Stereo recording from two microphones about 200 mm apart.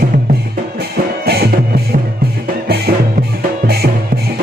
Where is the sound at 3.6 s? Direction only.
50° right (ahead or behind).